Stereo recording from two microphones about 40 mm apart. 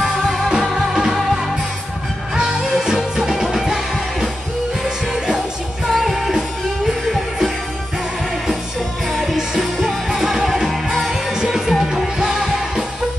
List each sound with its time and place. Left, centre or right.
0.0 s music: centre
5.9 s music: centre
9.1 s music: centre